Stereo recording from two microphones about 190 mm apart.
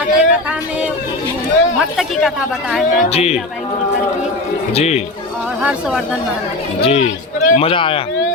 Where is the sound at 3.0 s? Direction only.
35° left (ahead or behind).